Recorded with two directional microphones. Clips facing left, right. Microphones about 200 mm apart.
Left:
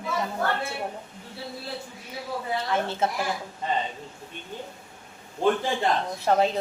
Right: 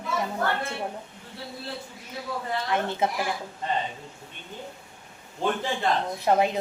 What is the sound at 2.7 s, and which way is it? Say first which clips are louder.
Speech: right 1 dB; 15° right (ahead or behind).